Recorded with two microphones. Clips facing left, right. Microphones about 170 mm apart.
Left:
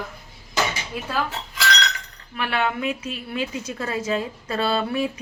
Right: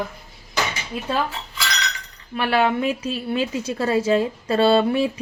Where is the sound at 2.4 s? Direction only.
35° right (ahead or behind).